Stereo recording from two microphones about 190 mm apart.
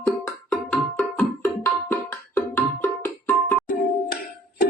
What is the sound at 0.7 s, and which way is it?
Music, 5° left (ahead or behind).